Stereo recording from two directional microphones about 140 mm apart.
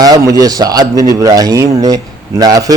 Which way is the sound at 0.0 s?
25° right (ahead or behind).